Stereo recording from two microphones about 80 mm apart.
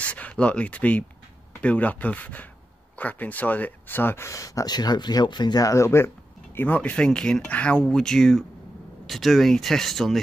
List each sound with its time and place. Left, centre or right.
0.0 s speech: centre; by 4.7 s left
4.7 s speech: left
5.7 s speech: left; by 10.2 s centre